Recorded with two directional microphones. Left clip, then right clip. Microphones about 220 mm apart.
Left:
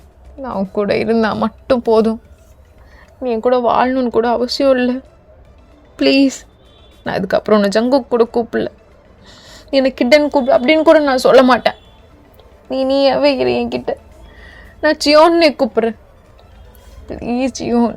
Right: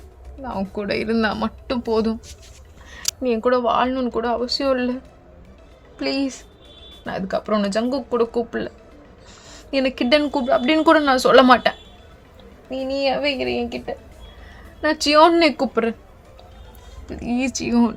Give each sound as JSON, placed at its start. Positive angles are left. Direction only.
{"t": 0.4, "sound": "a woman's voice", "side_deg": 25}
{"t": 3.4, "sound": "a woman's voice", "side_deg": 25}
{"t": 6.0, "sound": "a woman's voice", "side_deg": 35}
{"t": 12.7, "sound": "speech", "side_deg": 40}
{"t": 14.8, "sound": "a woman's voice", "side_deg": 15}
{"t": 17.1, "sound": "a woman's voice", "side_deg": 10}